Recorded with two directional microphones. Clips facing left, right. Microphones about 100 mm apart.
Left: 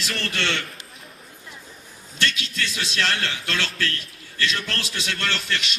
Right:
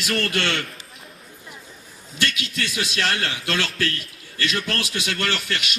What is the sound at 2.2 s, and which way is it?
A man's voice, 10° right (ahead or behind).